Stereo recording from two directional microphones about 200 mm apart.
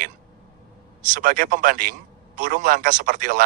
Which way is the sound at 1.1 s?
40° right (ahead or behind).